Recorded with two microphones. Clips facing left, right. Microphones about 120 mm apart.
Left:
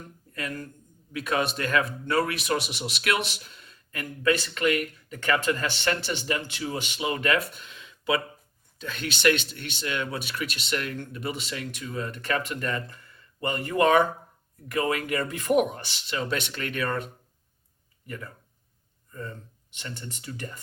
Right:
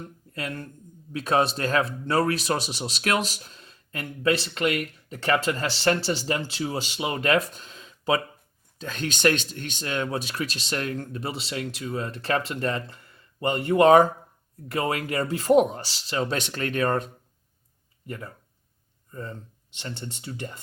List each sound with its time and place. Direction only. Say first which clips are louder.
0.0 s a man's voice: right 2 dB; 30° right (ahead or behind)